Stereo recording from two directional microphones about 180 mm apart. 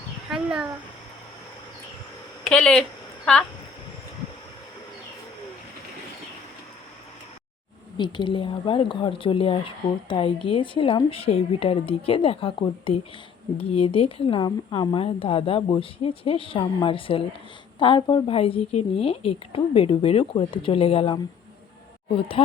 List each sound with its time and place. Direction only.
0.3 s a sound: 5° right (ahead or behind)
2.4 s speech: 5° left (ahead or behind)
7.9 s a woman's voice: 25° left (ahead or behind)